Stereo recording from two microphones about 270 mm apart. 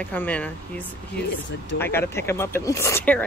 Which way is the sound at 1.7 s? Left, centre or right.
Centre.